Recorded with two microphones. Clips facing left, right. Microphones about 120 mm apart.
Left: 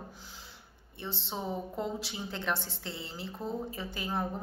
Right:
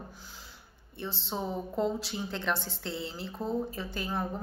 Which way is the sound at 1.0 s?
20° left (ahead or behind).